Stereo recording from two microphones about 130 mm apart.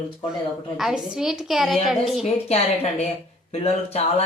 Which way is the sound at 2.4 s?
55° left (ahead or behind).